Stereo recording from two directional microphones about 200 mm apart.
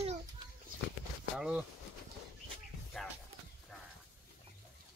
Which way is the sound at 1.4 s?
5° right (ahead or behind).